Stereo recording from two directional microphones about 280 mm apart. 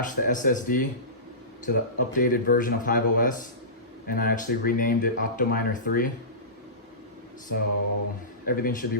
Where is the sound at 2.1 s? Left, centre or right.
Left.